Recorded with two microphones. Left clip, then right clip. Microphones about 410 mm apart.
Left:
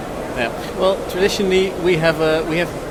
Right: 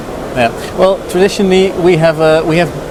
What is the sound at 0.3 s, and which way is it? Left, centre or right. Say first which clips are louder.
Speech: right 10 dB; right.